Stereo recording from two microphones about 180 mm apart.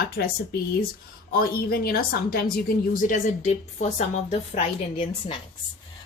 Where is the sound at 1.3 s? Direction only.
55° left (ahead or behind).